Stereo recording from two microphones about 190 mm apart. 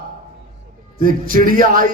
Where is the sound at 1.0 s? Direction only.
45° right (ahead or behind).